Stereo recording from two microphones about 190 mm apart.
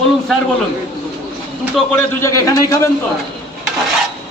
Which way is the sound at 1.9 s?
15° left (ahead or behind).